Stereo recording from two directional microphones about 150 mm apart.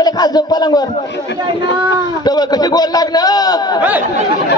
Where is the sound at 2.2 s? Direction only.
25° left (ahead or behind).